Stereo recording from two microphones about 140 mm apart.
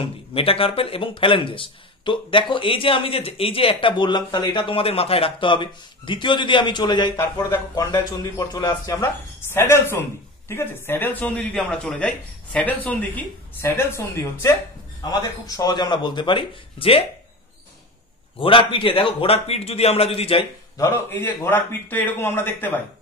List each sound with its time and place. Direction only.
0.0 s speech: 40° left (ahead or behind)
18.4 s a man's voice: 40° left (ahead or behind)
20.7 s speech: 20° left (ahead or behind)